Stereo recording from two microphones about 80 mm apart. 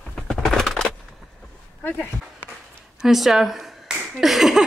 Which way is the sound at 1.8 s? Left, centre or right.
Left.